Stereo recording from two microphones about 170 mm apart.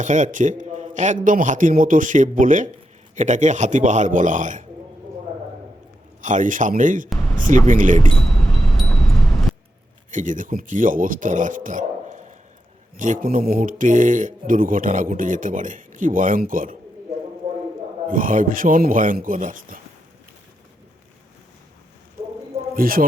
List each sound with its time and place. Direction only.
0.0 s speech: 45° right (ahead or behind)
6.2 s speech: 50° right (ahead or behind)
8.1 s a sound: 5° left (ahead or behind)
10.1 s speech: 50° right (ahead or behind)
18.1 s speech: 50° right (ahead or behind)
22.7 s a man's voice: 55° right (ahead or behind)